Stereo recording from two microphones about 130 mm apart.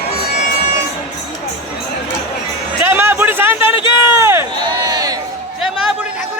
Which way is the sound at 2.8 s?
15° right (ahead or behind).